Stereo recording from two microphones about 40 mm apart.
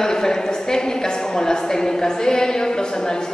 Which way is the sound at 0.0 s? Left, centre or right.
Centre.